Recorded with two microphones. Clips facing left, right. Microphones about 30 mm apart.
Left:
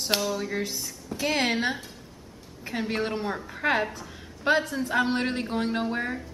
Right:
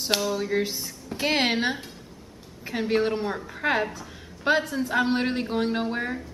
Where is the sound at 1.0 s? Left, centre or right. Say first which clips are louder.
Right 2 dB; right.